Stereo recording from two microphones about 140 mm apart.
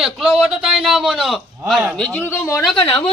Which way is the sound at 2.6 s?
Centre (ahead or behind).